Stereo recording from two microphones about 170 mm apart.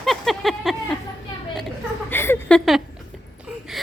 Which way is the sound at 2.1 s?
15° left (ahead or behind).